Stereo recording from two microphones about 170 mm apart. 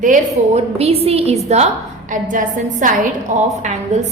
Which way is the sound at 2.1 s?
50° right (ahead or behind).